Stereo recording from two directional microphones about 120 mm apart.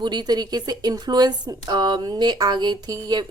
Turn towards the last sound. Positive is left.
turn(degrees=-35)  # may be behind; listen again after turning